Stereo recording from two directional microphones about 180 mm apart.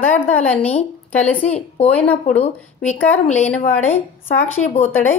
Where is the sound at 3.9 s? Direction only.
35° left (ahead or behind).